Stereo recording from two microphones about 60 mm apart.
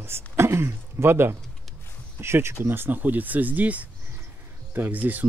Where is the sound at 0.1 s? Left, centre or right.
Right.